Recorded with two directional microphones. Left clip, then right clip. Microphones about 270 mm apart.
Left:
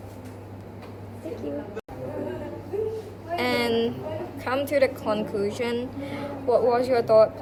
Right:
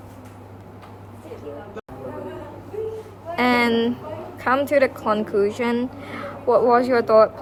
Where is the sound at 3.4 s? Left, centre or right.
Right.